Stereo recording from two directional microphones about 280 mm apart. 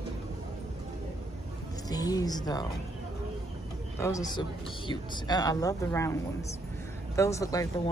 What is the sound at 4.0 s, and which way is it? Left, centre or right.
Speech, centre.